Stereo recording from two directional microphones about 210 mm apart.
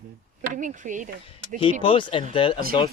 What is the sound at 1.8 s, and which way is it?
Speech, 25° left (ahead or behind).